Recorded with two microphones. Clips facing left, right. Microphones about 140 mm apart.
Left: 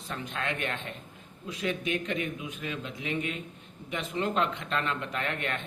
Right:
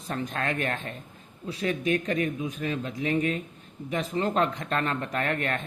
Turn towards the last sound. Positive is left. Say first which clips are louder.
# right 5 dB
turn(degrees=-40)  # may be behind; listen again after turning